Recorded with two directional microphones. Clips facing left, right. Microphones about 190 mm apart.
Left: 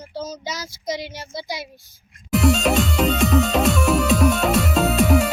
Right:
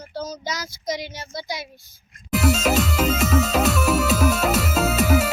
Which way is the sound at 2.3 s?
Centre (ahead or behind).